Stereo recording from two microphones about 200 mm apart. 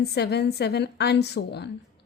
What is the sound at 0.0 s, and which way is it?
A woman's voice, 55° left (ahead or behind).